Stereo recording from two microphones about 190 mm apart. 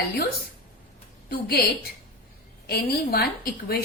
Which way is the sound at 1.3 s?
55° left (ahead or behind).